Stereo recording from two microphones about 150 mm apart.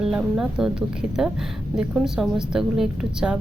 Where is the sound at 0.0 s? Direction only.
5° right (ahead or behind).